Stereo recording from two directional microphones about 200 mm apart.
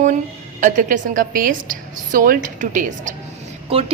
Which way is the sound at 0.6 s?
40° right (ahead or behind).